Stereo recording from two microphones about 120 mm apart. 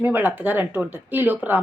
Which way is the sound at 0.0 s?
15° right (ahead or behind).